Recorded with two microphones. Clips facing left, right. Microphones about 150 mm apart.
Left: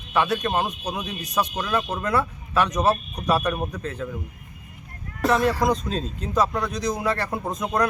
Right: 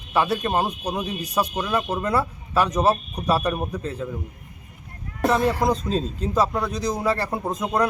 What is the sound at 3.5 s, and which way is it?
Speech, 10° right (ahead or behind).